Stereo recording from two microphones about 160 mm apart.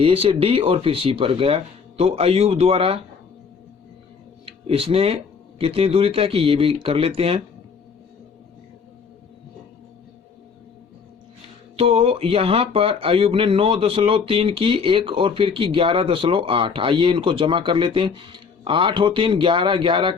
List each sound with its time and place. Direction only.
0.0 s speech: 35° right (ahead or behind)
4.4 s speech: 35° right (ahead or behind)
11.8 s speech: 40° right (ahead or behind)